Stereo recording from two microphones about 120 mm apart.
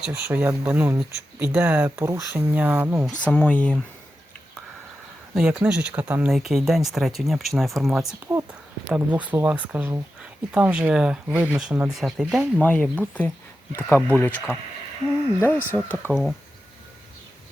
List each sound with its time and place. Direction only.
0.1 s speech: 15° right (ahead or behind)
3.2 s speech: 10° left (ahead or behind)
5.3 s speech: 5° right (ahead or behind)
6.3 s speech: centre (ahead or behind)
12.5 s speech: 10° left (ahead or behind)